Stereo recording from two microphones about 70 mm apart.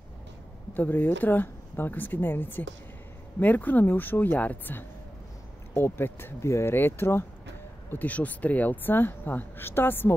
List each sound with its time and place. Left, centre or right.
0.7 s speech: left
7.9 s speech: left